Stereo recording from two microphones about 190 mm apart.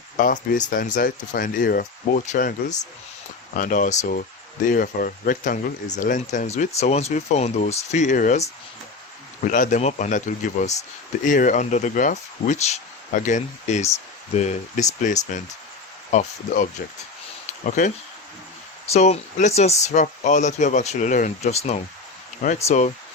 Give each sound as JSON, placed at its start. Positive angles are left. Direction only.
{"t": 0.2, "sound": "speech", "side_deg": 45}
{"t": 9.5, "sound": "speech", "side_deg": 40}
{"t": 17.7, "sound": "speech", "side_deg": 40}